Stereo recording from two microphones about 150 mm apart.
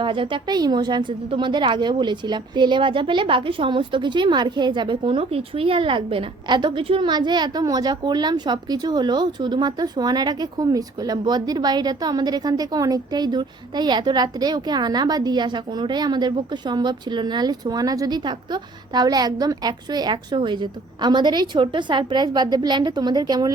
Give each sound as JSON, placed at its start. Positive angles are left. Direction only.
{"t": 0.0, "sound": "a woman's voice", "side_deg": -35}